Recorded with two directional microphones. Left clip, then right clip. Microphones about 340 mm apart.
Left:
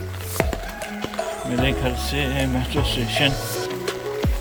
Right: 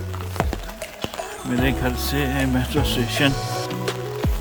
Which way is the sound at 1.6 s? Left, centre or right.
Centre.